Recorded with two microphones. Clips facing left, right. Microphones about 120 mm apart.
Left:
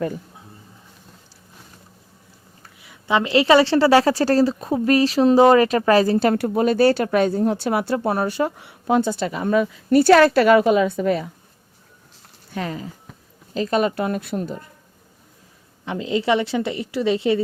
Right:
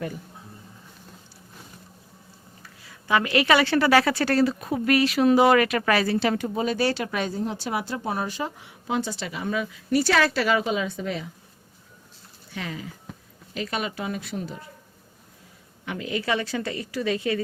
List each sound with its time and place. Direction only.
2.8 s a woman's voice: 20° left (ahead or behind); by 6.4 s 45° left (ahead or behind)
6.4 s speech: 60° left (ahead or behind)
12.5 s a woman's voice: 40° left (ahead or behind)
13.1 s a sound: centre (ahead or behind)
13.5 s a woman's voice: 40° left (ahead or behind)
13.9 s speech: 55° left (ahead or behind)
15.9 s a woman's voice: 25° left (ahead or behind)